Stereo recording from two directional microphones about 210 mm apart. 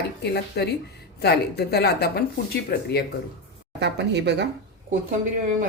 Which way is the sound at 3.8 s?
55° right (ahead or behind).